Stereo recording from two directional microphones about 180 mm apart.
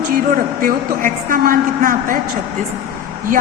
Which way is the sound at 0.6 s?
50° right (ahead or behind).